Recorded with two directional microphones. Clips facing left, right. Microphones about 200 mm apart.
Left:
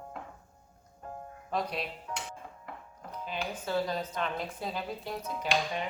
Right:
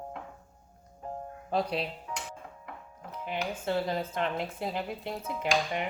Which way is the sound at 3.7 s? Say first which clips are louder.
Right 1 dB; 25° right (ahead or behind).